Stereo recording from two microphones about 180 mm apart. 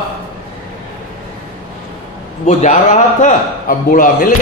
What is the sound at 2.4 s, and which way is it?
A man's voice, 45° left (ahead or behind).